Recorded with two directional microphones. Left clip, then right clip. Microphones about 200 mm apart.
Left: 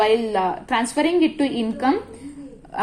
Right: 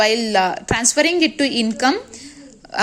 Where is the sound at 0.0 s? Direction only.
40° right (ahead or behind).